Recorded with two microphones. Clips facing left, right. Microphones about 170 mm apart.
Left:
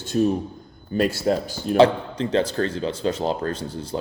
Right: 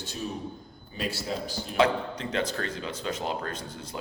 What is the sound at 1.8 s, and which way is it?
A man's voice, 30° left (ahead or behind).